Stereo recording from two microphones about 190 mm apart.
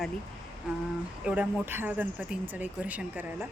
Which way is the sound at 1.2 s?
5° right (ahead or behind).